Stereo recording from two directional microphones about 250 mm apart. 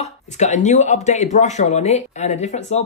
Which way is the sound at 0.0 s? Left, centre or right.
Left.